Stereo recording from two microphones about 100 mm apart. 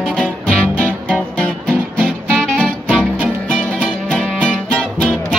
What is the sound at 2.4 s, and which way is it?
Music, 10° left (ahead or behind).